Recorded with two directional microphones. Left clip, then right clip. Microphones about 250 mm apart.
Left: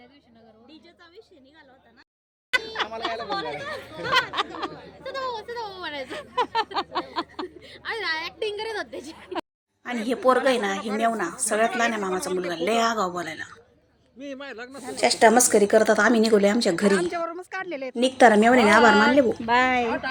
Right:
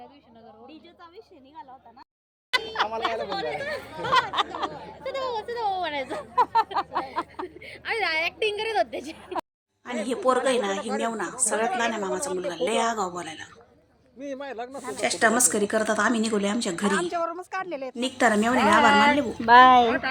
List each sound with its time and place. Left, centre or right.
2.7 s speech: left
3.3 s a woman's voice: centre
4.0 s a sound: left
5.0 s a woman's voice: centre
6.1 s a sound: left
7.6 s a woman's voice: centre
9.8 s a woman's voice: centre
14.2 s speech: left
14.9 s a woman's voice: centre
16.9 s a woman's voice: centre
18.0 s a woman's voice: centre